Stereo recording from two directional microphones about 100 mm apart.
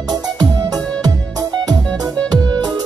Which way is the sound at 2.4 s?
45° right (ahead or behind).